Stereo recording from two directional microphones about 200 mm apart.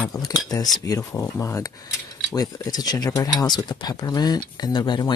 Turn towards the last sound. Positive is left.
turn(degrees=20)  # may be behind; listen again after turning